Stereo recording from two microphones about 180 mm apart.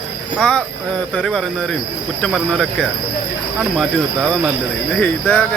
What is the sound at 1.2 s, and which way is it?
Speech, 5° left (ahead or behind).